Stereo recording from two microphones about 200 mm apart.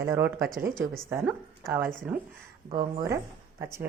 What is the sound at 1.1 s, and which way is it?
A woman's voice, centre (ahead or behind).